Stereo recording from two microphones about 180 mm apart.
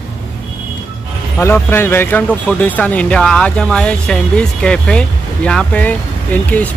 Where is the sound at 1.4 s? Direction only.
15° left (ahead or behind).